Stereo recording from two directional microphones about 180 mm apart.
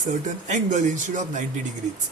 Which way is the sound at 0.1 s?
45° right (ahead or behind).